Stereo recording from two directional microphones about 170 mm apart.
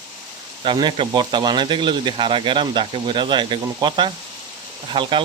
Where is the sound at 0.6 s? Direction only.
25° right (ahead or behind).